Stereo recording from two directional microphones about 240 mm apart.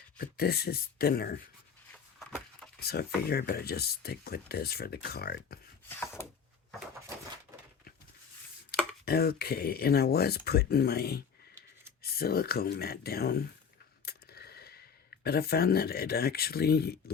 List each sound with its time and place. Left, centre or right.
0.2 s speech: left
1.9 s a sound: centre
2.8 s speech: left
5.9 s wood: centre
9.0 s speech: left
14.0 s a sound: left
15.2 s speech: left